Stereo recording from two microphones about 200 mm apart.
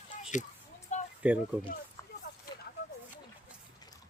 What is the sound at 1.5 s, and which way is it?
Speech, 10° right (ahead or behind).